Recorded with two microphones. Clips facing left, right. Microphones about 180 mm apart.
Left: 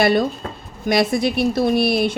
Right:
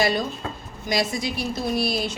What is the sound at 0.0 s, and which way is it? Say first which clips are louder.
A woman's voice: left 6 dB; 60° left (ahead or behind).